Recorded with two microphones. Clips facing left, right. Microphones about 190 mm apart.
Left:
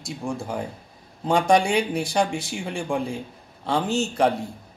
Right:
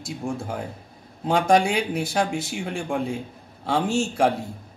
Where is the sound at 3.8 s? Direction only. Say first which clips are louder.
Right 1 dB; 30° right (ahead or behind).